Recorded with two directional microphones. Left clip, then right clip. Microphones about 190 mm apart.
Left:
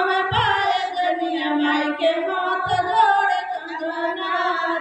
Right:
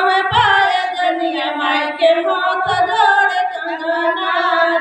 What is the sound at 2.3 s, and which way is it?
Music, 15° left (ahead or behind).